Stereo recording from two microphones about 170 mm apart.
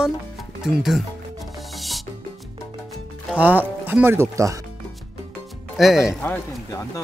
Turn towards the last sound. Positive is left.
turn(degrees=15)  # may be behind; listen again after turning